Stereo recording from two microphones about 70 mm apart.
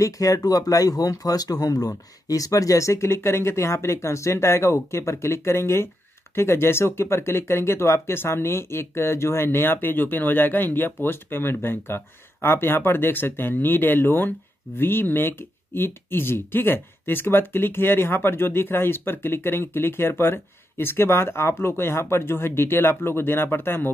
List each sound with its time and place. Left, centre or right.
0.0 s speech: left